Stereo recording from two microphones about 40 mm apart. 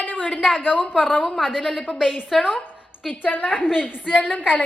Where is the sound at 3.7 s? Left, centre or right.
Centre.